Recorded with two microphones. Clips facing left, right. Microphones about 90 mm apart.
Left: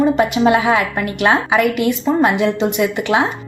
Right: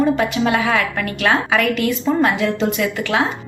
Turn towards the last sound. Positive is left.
turn(degrees=20)  # may be behind; listen again after turning